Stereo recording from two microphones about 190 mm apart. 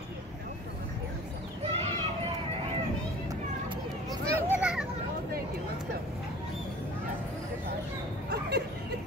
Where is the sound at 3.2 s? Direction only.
20° right (ahead or behind).